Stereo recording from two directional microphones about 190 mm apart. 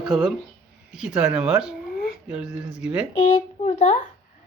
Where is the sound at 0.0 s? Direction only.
Centre (ahead or behind).